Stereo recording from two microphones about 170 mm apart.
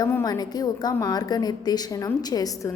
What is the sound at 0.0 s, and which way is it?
A woman's voice, 20° left (ahead or behind).